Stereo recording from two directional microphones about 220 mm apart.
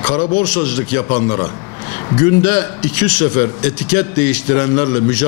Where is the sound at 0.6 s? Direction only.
10° left (ahead or behind).